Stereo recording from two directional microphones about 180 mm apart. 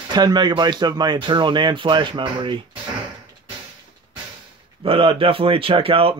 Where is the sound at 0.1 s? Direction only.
25° right (ahead or behind).